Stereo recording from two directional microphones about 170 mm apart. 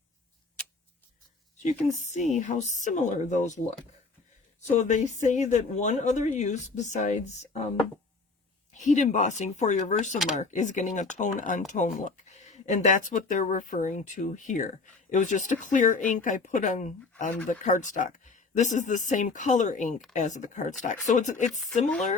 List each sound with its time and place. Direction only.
2.0 s speech: 45° left (ahead or behind)
4.8 s speech: 45° left (ahead or behind)
8.7 s speech: 45° left (ahead or behind)